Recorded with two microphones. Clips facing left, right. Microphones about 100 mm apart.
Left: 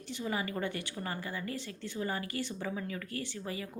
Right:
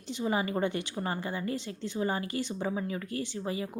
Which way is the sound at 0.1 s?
20° right (ahead or behind).